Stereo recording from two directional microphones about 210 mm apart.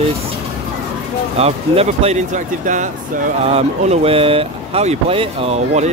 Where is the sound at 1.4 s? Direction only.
30° right (ahead or behind).